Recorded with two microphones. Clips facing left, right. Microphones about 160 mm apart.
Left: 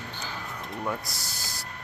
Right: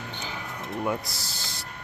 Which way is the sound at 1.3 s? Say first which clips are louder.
Right 1 dB; 25° right (ahead or behind).